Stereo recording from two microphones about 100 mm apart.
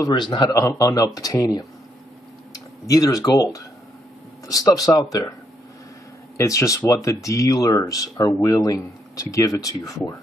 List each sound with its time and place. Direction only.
0.2 s speech: 45° left (ahead or behind)
6.3 s speech: 30° left (ahead or behind)